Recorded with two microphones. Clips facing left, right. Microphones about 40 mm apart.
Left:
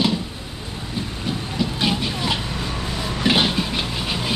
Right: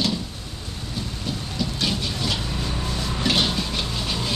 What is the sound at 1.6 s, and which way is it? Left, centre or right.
Vehicle, left.